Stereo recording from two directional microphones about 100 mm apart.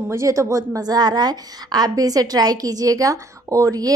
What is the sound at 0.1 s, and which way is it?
A woman's voice, 30° right (ahead or behind).